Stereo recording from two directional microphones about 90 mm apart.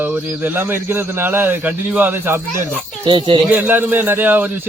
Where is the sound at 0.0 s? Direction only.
20° right (ahead or behind).